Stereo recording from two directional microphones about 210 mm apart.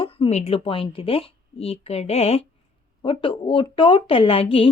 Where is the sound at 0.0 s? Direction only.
25° left (ahead or behind).